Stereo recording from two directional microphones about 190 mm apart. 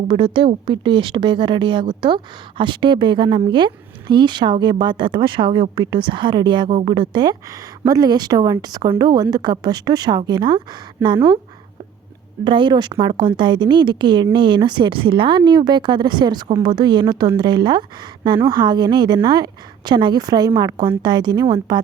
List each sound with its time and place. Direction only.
0.1 s speech: 25° right (ahead or behind)
12.5 s speech: 25° right (ahead or behind)